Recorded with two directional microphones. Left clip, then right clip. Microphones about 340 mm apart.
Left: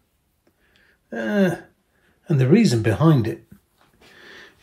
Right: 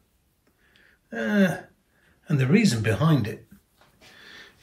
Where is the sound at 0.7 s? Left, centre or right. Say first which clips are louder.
Left 4 dB; centre.